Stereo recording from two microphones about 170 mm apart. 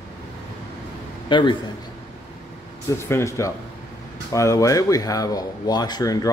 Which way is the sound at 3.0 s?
15° left (ahead or behind).